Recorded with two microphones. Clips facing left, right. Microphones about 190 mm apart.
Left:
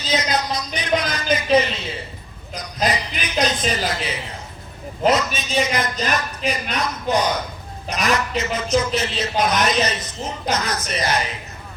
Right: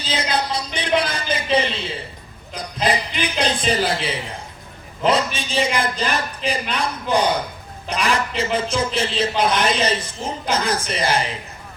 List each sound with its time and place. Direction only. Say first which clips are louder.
0.0 s music: left 1 dB; 30° right (ahead or behind)
2.6 s a man's voice: right 1 dB; 30° right (ahead or behind)